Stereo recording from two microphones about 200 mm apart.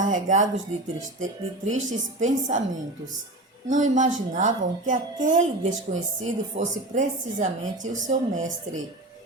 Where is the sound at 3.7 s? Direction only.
40° right (ahead or behind).